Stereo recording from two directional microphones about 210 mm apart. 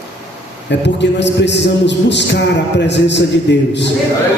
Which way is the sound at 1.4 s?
55° left (ahead or behind).